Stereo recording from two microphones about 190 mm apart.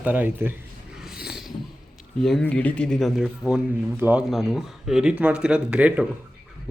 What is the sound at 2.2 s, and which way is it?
Speech, 5° left (ahead or behind).